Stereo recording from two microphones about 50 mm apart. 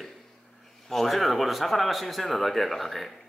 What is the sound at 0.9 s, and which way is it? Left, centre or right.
Speech, centre.